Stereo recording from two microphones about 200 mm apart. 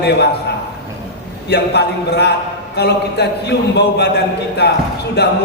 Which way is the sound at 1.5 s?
55° left (ahead or behind).